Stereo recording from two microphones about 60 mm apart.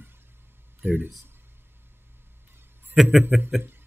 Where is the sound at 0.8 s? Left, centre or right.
Right.